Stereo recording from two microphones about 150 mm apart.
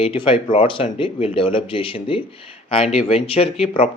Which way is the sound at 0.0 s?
35° left (ahead or behind).